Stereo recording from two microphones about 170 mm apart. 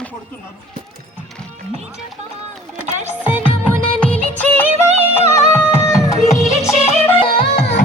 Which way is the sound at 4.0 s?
5° left (ahead or behind).